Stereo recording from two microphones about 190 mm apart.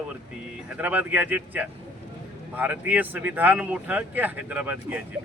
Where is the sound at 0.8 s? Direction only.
10° right (ahead or behind).